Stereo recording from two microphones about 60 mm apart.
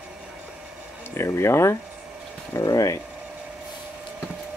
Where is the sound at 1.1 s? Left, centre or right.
Left.